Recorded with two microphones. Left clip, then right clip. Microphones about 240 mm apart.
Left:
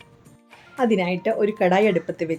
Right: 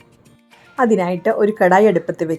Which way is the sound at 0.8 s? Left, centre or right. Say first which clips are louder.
Right 5 dB; centre.